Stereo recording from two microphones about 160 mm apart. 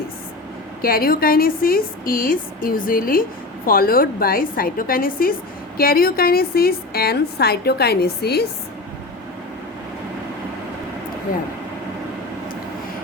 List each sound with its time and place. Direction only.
0.8 s a woman's voice: 70° left (ahead or behind); by 8.4 s 85° left